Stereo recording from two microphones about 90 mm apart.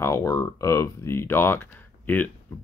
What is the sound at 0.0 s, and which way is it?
Speech, 30° left (ahead or behind).